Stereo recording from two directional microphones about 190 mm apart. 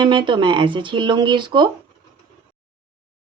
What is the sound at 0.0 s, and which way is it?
Speech, 25° right (ahead or behind).